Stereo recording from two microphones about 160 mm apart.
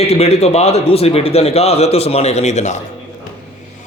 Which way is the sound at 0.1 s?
40° left (ahead or behind).